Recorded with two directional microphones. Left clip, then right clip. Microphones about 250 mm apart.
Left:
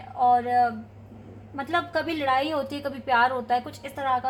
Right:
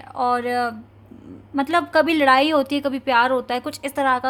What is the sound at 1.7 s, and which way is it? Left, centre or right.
A woman's voice, right.